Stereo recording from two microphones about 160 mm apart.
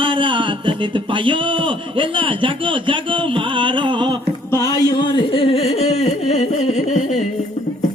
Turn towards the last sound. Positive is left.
turn(degrees=45)  # may be behind; listen again after turning